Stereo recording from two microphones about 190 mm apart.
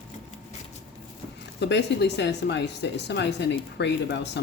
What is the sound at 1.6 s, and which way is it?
Speech, 65° left (ahead or behind).